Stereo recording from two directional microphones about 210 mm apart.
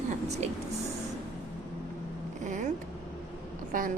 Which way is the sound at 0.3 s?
30° right (ahead or behind).